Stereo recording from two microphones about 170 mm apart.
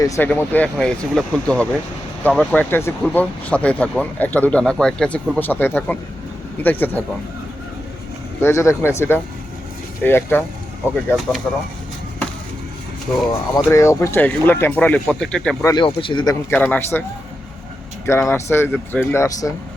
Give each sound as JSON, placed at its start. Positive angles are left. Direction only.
{"t": 0.0, "sound": "speech", "side_deg": 10}
{"t": 8.4, "sound": "speech", "side_deg": 15}
{"t": 11.5, "sound": "speech", "side_deg": 5}
{"t": 13.7, "sound": "speech", "side_deg": 15}
{"t": 15.6, "sound": "speech", "side_deg": 25}
{"t": 16.5, "sound": "speech", "side_deg": 10}
{"t": 18.0, "sound": "speech", "side_deg": 15}